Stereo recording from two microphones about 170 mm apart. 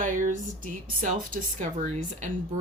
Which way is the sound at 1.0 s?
50° right (ahead or behind).